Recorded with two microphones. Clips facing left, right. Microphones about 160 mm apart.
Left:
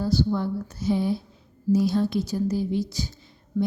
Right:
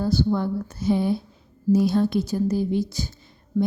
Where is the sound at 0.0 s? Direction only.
55° right (ahead or behind).